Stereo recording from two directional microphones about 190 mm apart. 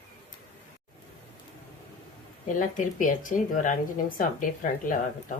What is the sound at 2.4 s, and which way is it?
Speech, 45° left (ahead or behind).